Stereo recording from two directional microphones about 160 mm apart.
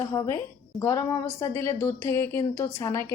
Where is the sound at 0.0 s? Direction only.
15° left (ahead or behind).